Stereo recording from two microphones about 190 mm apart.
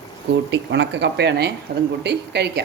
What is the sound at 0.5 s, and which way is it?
Speech, 70° right (ahead or behind).